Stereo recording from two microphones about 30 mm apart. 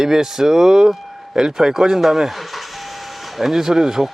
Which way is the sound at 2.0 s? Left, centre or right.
Centre.